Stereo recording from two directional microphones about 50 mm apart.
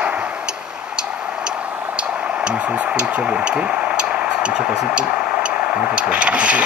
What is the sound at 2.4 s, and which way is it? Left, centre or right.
Speech, centre.